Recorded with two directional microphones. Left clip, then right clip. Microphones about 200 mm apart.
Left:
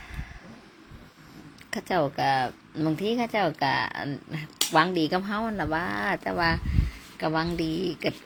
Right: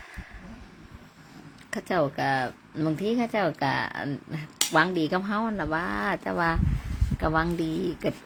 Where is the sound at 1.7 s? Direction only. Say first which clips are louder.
Even; 20° right (ahead or behind).